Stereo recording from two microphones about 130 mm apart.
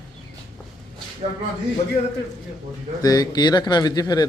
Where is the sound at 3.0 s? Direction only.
30° left (ahead or behind).